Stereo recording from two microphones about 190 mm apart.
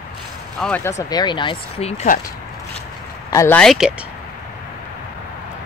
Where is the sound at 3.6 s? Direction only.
Centre (ahead or behind).